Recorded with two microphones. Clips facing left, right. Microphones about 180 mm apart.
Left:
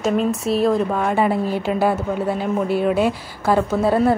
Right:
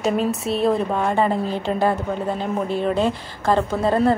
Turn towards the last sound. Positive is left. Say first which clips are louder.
# left 2 dB
turn(degrees=5)  # may be behind; listen again after turning